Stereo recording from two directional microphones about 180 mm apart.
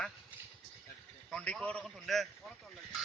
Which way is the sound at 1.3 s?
5° left (ahead or behind).